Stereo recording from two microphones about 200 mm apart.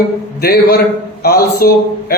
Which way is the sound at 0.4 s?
50° left (ahead or behind).